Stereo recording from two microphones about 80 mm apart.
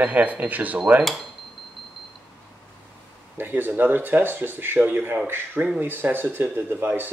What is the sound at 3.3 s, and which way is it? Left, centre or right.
Speech, right.